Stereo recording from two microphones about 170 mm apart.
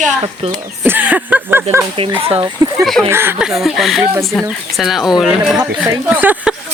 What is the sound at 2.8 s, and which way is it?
Speech, centre (ahead or behind).